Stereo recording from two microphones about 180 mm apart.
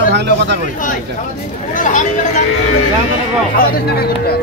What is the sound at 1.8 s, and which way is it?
Speech, 45° left (ahead or behind).